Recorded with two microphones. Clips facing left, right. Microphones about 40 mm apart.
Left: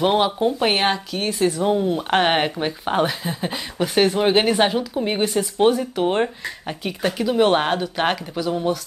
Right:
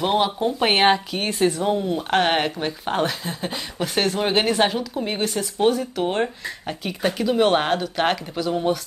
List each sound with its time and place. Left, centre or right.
0.0 s speech: centre
0.6 s speech: centre
1.6 s speech: centre